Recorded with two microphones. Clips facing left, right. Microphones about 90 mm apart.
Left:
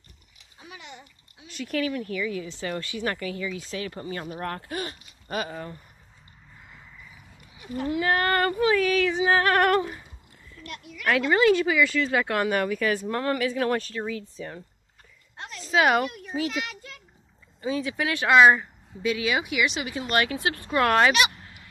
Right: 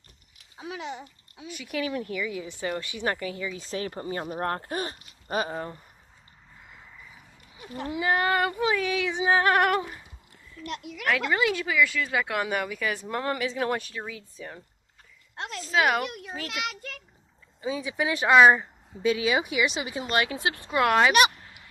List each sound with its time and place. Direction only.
1.5 s speech: 5° right (ahead or behind)
1.8 s speech: 25° right (ahead or behind)
3.7 s speech: 35° right (ahead or behind)
7.5 s a sound: 40° right (ahead or behind)
7.8 s speech: 20° right (ahead or behind)
8.1 s speech: 5° right (ahead or behind)
8.5 s speech: 20° right (ahead or behind)
10.7 s speech: 65° right (ahead or behind)
11.1 s speech: centre (ahead or behind)
15.3 s a sound: 90° right
15.6 s a woman's voice: centre (ahead or behind)
16.4 s a child's voice: 80° right
17.6 s speech: 10° right (ahead or behind)
19.0 s speech: 30° right (ahead or behind); by 21.1 s 10° right (ahead or behind)